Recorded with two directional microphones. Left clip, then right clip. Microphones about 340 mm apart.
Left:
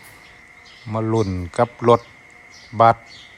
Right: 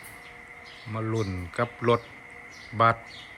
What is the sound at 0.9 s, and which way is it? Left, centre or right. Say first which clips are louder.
Speech: left 10 dB; centre.